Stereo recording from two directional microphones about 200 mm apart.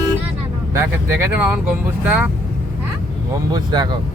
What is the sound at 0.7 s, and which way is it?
Speech, 10° right (ahead or behind).